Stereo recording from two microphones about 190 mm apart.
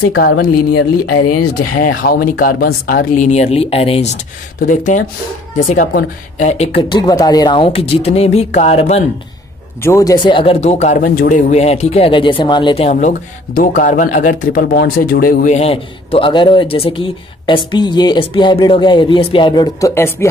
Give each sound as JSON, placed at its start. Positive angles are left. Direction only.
{"t": 0.1, "sound": "speech", "side_deg": 65}
{"t": 1.8, "sound": "speech", "side_deg": 50}
{"t": 3.2, "sound": "speech", "side_deg": 35}
{"t": 6.8, "sound": "speech", "side_deg": 20}
{"t": 9.8, "sound": "speech", "side_deg": 15}
{"t": 11.5, "sound": "a man's voice", "side_deg": 35}